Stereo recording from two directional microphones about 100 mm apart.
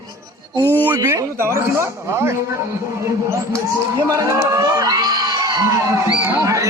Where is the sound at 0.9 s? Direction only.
35° right (ahead or behind).